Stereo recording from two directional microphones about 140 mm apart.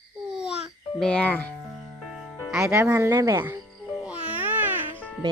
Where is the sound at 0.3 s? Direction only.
5° right (ahead or behind).